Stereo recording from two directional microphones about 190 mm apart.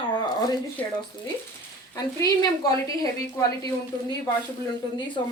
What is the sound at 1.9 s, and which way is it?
A woman's voice, 20° left (ahead or behind).